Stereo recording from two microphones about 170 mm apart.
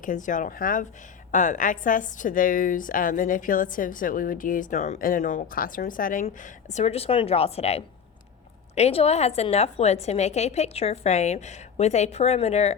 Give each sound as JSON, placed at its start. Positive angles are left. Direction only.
{"t": 0.0, "sound": "a woman's voice", "side_deg": 50}
{"t": 6.2, "sound": "a woman's voice", "side_deg": 40}